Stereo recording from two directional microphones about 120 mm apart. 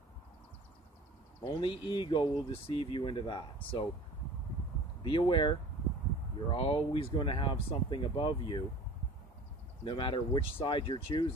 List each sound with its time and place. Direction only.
1.4 s speech: 40° left (ahead or behind)
5.0 s speech: 40° left (ahead or behind)
9.8 s speech: 45° left (ahead or behind)